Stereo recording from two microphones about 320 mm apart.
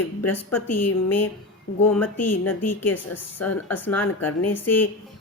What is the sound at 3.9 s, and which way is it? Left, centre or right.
Speech, centre.